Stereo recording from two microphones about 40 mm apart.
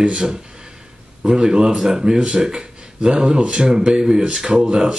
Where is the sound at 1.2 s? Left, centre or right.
Centre.